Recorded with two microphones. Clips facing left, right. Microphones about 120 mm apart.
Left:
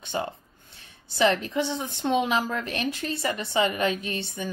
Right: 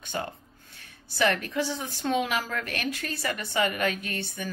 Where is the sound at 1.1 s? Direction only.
20° left (ahead or behind).